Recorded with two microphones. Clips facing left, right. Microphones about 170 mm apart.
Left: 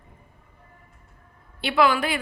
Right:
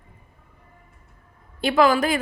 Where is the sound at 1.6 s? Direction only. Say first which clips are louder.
Right 3 dB; 40° right (ahead or behind).